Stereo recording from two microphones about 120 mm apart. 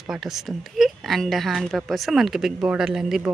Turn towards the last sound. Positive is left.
turn(degrees=-5)  # may be behind; listen again after turning